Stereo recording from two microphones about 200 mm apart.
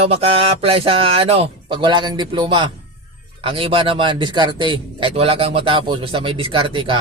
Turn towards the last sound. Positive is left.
turn(degrees=-25)  # may be behind; listen again after turning